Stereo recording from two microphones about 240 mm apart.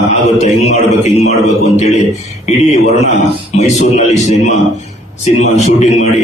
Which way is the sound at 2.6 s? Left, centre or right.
Left.